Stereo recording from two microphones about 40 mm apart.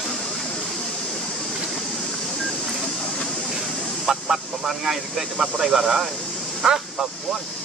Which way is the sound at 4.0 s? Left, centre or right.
Centre.